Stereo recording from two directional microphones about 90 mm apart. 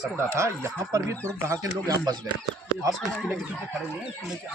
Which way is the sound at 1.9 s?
40° right (ahead or behind).